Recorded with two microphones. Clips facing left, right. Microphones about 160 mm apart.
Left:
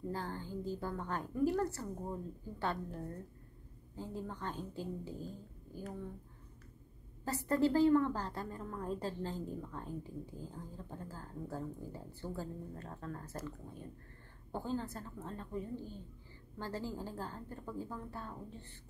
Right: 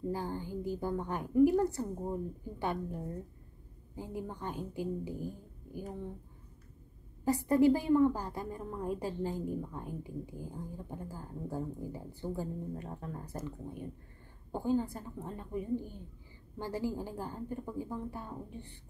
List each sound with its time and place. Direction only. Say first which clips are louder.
0.1 s a woman's voice: right 4 dB; 15° right (ahead or behind)
7.2 s a woman's voice: right 6 dB; 15° right (ahead or behind)